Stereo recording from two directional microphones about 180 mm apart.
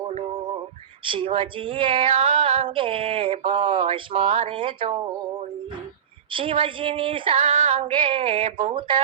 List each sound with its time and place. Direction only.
1.0 s female singing: 30° right (ahead or behind)
6.3 s female singing: 30° right (ahead or behind)